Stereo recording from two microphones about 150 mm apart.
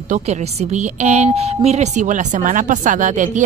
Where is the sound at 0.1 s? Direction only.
45° right (ahead or behind).